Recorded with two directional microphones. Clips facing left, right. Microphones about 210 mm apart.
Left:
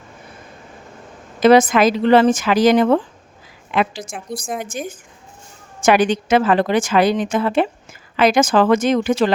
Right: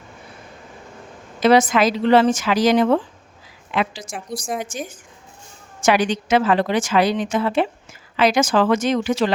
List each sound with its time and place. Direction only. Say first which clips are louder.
1.4 s a woman's voice: left 3 dB; 50° left (ahead or behind)